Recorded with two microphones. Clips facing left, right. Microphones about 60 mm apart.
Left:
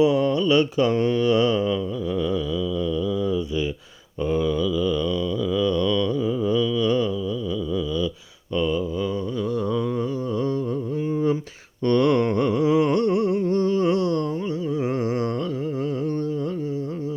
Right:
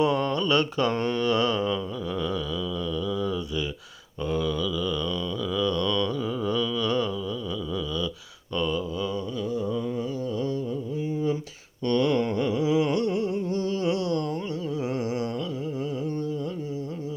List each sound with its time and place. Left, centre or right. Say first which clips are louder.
0.0 s mantra: left 5 dB; centre
4.3 s mantra: left 5 dB; left
8.5 s mantra: left 4 dB; centre
11.9 s humming: left 4 dB; left